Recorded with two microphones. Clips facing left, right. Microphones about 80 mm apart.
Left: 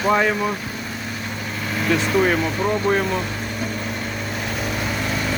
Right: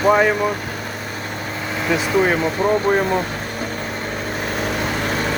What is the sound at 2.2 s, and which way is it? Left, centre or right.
Speech, centre.